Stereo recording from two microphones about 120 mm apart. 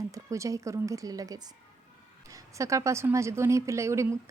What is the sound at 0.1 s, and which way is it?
A woman's voice, 25° right (ahead or behind).